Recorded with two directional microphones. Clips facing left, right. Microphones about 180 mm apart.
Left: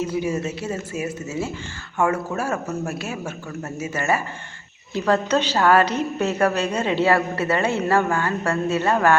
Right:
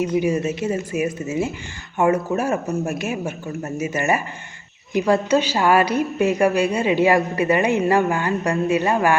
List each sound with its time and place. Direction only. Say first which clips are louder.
0.2 s a woman's voice: right 4 dB; 15° right (ahead or behind)